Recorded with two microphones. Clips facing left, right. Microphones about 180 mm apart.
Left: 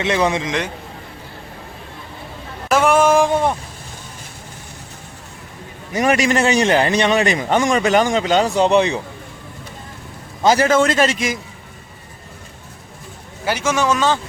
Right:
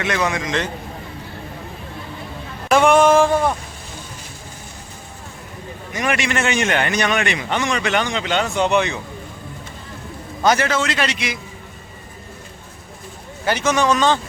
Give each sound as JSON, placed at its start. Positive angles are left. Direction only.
{"t": 0.0, "sound": "a man's voice", "side_deg": 25}
{"t": 2.6, "sound": "a sound", "side_deg": 5}
{"t": 6.0, "sound": "speech", "side_deg": 40}
{"t": 7.3, "sound": "speech", "side_deg": 40}
{"t": 10.4, "sound": "a man's voice", "side_deg": 25}
{"t": 10.7, "sound": "a man's voice", "side_deg": 50}
{"t": 13.4, "sound": "speech", "side_deg": 10}